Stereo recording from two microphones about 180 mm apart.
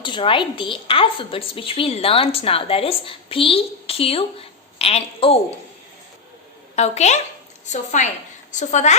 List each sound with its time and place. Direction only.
0.0 s a woman's voice: 30° left (ahead or behind)
6.7 s a woman's voice: 40° left (ahead or behind)